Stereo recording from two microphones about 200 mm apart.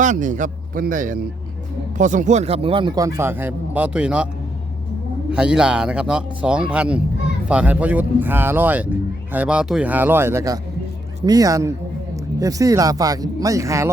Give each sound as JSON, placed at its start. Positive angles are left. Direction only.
{"t": 0.0, "sound": "a man's voice", "side_deg": -40}
{"t": 5.3, "sound": "speech", "side_deg": -5}